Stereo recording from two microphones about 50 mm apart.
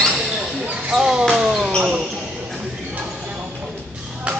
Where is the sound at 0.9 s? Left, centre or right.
Centre.